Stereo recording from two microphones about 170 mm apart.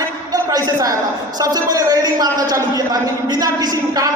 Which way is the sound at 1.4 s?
25° right (ahead or behind).